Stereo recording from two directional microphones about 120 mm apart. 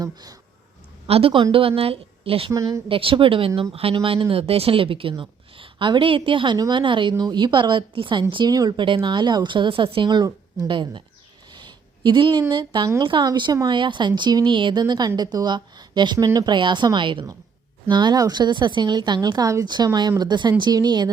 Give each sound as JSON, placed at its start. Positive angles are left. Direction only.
{"t": 0.0, "sound": "speech", "side_deg": -30}
{"t": 1.0, "sound": "speech", "side_deg": -55}
{"t": 2.5, "sound": "speech", "side_deg": -30}
{"t": 2.9, "sound": "speech", "side_deg": -45}